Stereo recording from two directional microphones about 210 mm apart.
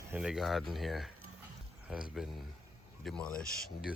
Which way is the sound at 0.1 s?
5° right (ahead or behind).